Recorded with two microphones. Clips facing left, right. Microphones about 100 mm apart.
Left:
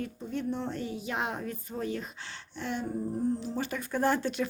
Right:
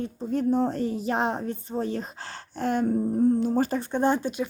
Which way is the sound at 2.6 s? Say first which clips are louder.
Right 9 dB; 45° right (ahead or behind).